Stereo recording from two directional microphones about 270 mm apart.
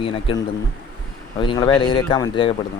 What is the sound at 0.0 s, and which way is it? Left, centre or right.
Speech, centre.